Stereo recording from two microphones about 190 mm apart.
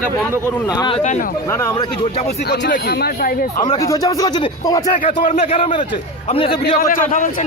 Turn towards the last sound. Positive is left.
turn(degrees=45)  # may be behind; listen again after turning